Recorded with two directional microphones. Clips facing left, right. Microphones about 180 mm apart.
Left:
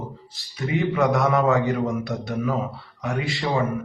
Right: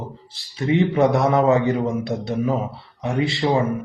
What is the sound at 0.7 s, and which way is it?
A man's voice, 30° right (ahead or behind).